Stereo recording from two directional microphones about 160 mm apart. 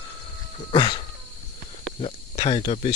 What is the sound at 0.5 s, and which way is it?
Speech, 30° left (ahead or behind).